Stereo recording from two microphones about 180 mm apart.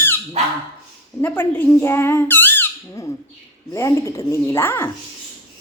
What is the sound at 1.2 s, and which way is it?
Speech, 10° left (ahead or behind).